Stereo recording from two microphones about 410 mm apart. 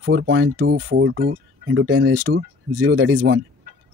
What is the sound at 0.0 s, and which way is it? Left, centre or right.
Speech, right.